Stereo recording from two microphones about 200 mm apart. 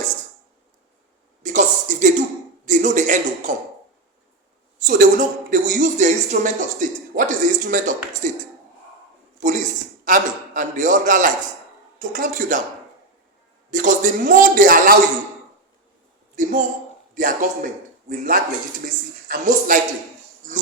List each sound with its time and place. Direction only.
1.4 s a sound: 40° right (ahead or behind)
2.6 s speech: 40° right (ahead or behind)
4.8 s speech: 40° right (ahead or behind)
9.4 s a man's voice: 40° right (ahead or behind)
13.7 s a man's voice: 40° right (ahead or behind)
16.3 s a woman's voice: 40° right (ahead or behind)